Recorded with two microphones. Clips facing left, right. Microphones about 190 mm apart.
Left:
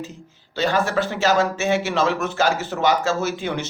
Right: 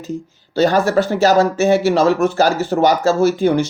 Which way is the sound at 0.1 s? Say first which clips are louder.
Right 13 dB; 40° right (ahead or behind).